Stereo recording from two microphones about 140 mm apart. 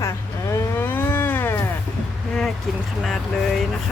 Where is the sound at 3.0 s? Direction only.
5° left (ahead or behind).